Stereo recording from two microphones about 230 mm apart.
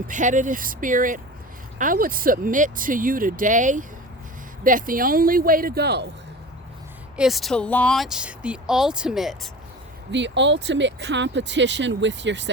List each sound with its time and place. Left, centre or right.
0.1 s speech: right
7.2 s speech: centre
10.1 s speech: right